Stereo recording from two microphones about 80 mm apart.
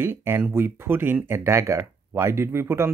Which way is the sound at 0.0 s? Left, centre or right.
Right.